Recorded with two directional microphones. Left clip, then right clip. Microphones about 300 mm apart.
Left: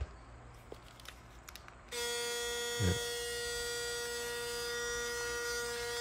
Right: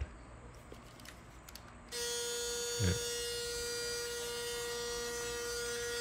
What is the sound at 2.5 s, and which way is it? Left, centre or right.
Electric shaver, left.